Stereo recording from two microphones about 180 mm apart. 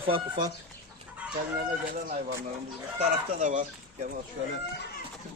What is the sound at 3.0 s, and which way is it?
A man's voice, 40° right (ahead or behind).